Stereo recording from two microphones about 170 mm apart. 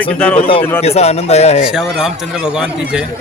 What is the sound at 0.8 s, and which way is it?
Speech, 40° left (ahead or behind).